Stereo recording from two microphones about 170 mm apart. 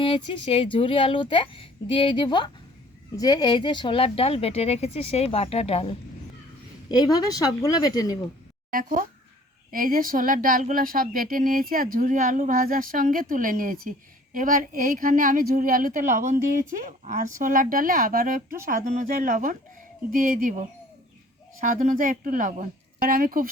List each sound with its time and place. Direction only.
0.0 s speech: 30° left (ahead or behind)
6.8 s speech: 25° left (ahead or behind)
8.7 s a woman's voice: 55° right (ahead or behind)